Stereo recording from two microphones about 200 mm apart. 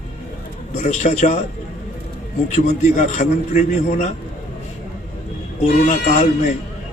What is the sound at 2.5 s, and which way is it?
A man's voice, 35° left (ahead or behind).